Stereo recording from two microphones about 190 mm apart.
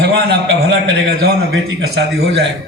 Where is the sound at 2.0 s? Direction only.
70° right (ahead or behind).